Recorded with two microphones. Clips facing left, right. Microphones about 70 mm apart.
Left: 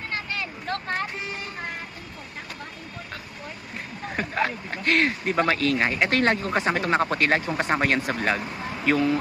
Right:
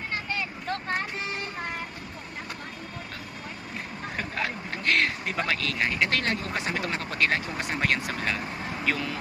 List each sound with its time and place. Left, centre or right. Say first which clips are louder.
4.4 s speech: left 6 dB; left